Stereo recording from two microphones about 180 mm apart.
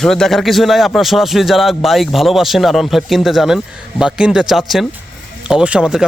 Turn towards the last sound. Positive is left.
turn(degrees=-5)  # may be behind; listen again after turning